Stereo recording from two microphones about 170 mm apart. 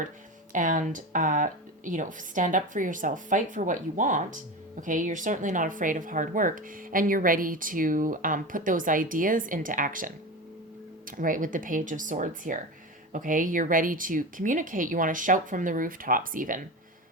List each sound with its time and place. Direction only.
0.5 s speech: 50° right (ahead or behind)